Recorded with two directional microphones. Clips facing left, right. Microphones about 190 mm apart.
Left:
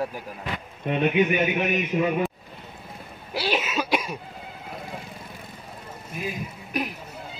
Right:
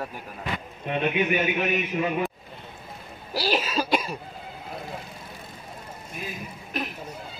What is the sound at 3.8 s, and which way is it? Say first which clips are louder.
Cough: even; 5° left (ahead or behind).